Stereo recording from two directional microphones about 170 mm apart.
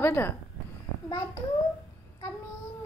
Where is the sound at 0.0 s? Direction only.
15° left (ahead or behind).